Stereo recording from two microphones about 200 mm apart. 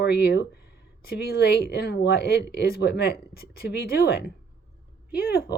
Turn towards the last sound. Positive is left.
turn(degrees=50)  # may be behind; listen again after turning